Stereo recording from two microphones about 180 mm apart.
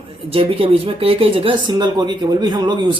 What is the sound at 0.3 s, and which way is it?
Speech, 30° right (ahead or behind).